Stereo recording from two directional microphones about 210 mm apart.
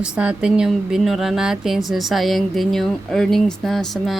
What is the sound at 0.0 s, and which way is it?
A woman's voice, 5° right (ahead or behind).